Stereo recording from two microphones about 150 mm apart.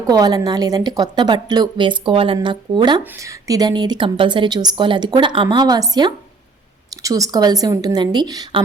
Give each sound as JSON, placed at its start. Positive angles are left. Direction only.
{"t": 0.1, "sound": "a woman's voice", "side_deg": -25}
{"t": 3.0, "sound": "a woman's voice", "side_deg": -15}